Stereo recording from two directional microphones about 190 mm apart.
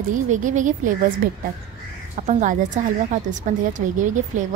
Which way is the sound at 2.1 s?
40° right (ahead or behind).